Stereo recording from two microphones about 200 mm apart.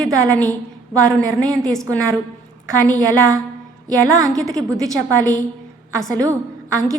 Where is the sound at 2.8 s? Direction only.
15° right (ahead or behind).